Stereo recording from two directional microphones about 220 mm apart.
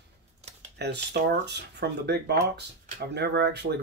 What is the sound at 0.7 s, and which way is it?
Speech, 45° right (ahead or behind).